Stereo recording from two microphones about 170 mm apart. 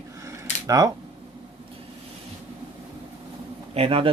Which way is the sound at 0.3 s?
20° right (ahead or behind).